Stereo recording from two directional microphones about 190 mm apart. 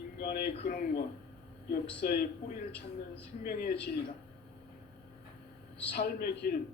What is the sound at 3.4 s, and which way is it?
Speech, 55° left (ahead or behind).